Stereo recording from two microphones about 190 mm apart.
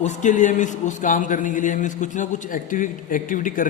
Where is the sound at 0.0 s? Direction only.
40° left (ahead or behind).